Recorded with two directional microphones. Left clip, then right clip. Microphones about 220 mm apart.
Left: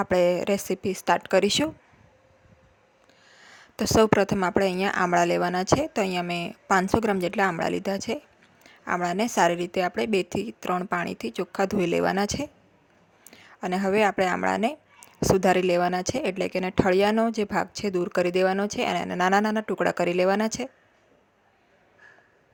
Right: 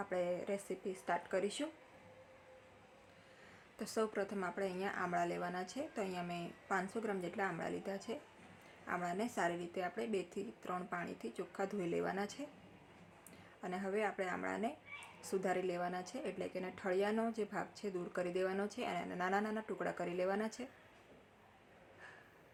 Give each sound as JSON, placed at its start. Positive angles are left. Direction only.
{"t": 0.0, "sound": "speech", "side_deg": 45}
{"t": 3.5, "sound": "speech", "side_deg": 45}